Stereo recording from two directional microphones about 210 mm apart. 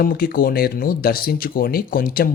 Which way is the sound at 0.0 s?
45° left (ahead or behind).